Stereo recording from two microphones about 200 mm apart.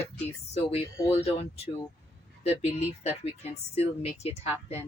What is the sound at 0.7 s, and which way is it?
Speech, 30° left (ahead or behind).